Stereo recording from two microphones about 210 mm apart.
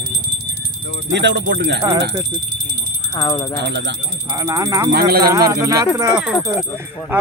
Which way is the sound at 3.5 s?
55° right (ahead or behind).